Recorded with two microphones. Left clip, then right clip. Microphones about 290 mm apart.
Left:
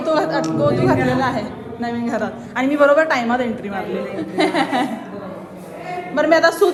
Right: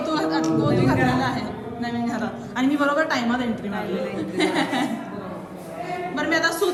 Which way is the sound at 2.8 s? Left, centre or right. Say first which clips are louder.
Left 10 dB; centre.